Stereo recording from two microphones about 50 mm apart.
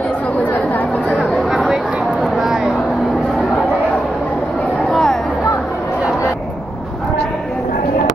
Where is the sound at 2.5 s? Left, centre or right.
Right.